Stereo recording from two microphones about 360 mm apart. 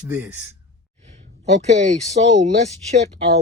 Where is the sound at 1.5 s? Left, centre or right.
Centre.